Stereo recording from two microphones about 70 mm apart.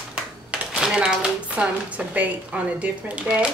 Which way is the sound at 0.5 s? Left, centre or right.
Centre.